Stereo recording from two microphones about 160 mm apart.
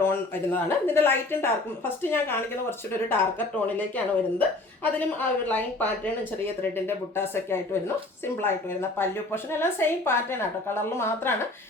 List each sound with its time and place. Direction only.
0.0 s a woman's voice: 15° left (ahead or behind)